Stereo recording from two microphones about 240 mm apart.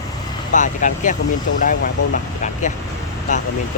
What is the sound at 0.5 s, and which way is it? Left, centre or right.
Speech, left.